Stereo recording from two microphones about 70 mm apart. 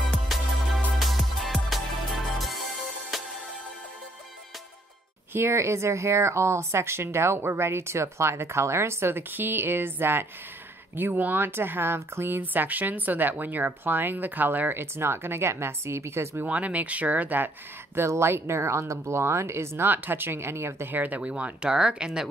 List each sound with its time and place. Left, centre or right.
0.1 s music: centre
5.3 s a woman's voice: right
16.4 s speech: centre
17.9 s a woman's voice: right
20.9 s speech: right